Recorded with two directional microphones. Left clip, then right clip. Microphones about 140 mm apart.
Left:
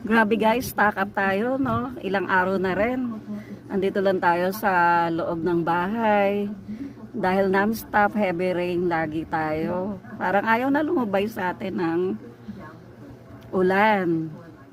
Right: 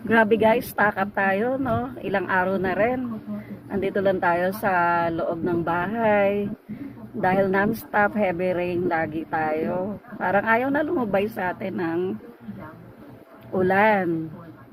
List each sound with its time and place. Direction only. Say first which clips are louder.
0.1 s a woman's voice: right 2 dB; 40° left (ahead or behind)
13.5 s a woman's voice: even; 30° left (ahead or behind)